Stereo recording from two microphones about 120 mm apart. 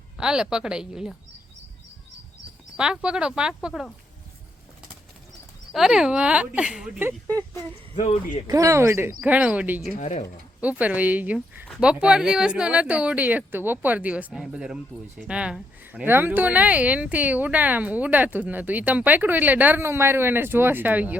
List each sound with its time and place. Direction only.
0.2 s speech: 5° right (ahead or behind)
2.7 s speech: 10° right (ahead or behind)
5.7 s speech: 5° right (ahead or behind)
7.9 s speech: 80° left
8.4 s speech: 25° right (ahead or behind)
10.0 s speech: 65° left (ahead or behind)
10.6 s speech: 10° right (ahead or behind)